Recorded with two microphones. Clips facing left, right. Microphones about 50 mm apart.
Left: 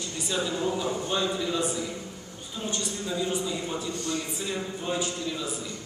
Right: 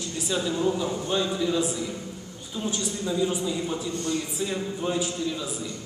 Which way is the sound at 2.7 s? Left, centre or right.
Centre.